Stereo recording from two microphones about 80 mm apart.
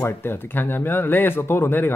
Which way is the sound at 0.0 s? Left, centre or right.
Left.